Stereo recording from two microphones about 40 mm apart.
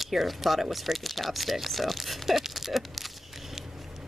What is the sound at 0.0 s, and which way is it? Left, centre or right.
Speech, centre.